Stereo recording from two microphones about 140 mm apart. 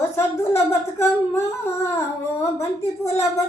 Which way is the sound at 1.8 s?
20° left (ahead or behind).